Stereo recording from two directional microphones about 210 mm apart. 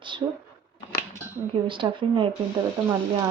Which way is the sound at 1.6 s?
25° right (ahead or behind).